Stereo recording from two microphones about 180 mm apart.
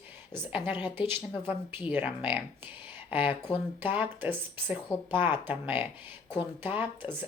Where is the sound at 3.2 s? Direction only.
30° left (ahead or behind).